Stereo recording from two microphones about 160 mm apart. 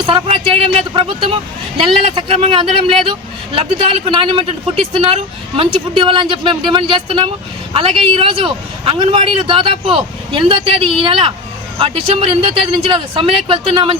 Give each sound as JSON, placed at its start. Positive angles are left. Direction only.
{"t": 0.0, "sound": "speech", "side_deg": -30}